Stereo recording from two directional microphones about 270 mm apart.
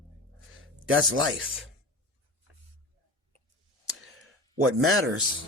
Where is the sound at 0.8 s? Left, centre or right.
Right.